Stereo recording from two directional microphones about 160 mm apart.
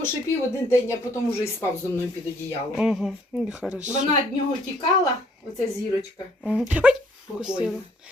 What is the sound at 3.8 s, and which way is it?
Speech, 50° right (ahead or behind).